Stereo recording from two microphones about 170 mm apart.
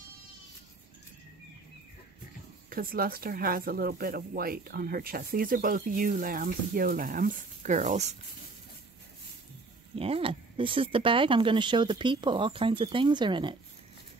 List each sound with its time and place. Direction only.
2.7 s speech: 60° right (ahead or behind); by 8.2 s 45° right (ahead or behind)
9.9 s speech: 35° right (ahead or behind)